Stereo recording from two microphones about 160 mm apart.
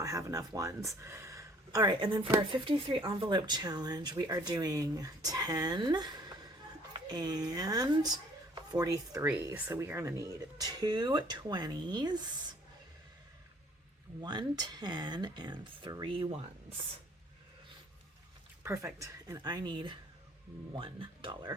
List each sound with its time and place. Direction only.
0.0 s speech: 20° right (ahead or behind)
14.2 s speech: 25° right (ahead or behind)
18.6 s speech: 15° right (ahead or behind); by 21.5 s 30° right (ahead or behind)